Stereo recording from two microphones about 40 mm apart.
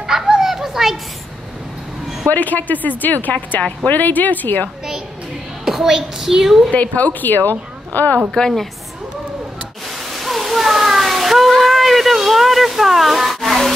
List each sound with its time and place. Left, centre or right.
0.0 s children playing: centre
2.2 s a woman's voice: left
5.7 s a woman's voice: centre
6.7 s a woman's voice: left
9.8 s a sound: centre